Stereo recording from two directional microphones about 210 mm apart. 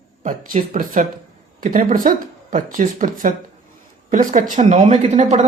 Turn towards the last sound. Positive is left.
turn(degrees=-30)  # may be behind; listen again after turning